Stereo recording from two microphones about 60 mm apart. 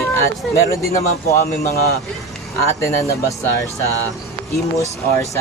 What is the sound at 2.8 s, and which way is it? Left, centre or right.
Speech, left.